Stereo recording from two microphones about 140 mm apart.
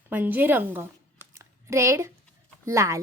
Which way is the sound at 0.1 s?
15° right (ahead or behind).